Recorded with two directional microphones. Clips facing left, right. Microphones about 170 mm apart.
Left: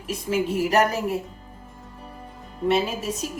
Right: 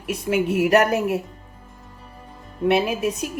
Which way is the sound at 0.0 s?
65° right (ahead or behind).